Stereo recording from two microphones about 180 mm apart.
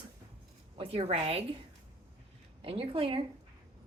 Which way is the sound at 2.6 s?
30° right (ahead or behind).